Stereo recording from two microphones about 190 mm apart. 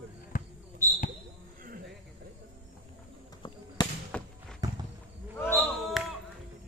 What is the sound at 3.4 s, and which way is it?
Basketball bounce, 25° left (ahead or behind).